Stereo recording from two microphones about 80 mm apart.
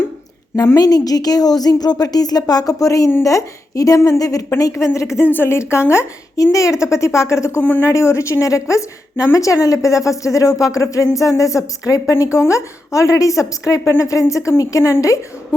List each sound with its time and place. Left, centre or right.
0.8 s a woman's voice: left
7.6 s speech: left
7.9 s a woman's voice: left